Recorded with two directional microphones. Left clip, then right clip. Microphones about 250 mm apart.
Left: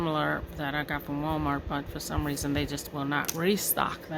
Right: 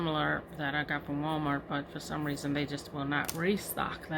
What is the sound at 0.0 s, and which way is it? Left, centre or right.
Speech, left.